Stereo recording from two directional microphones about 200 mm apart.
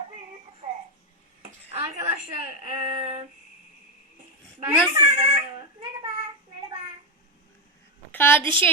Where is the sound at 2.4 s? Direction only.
30° right (ahead or behind).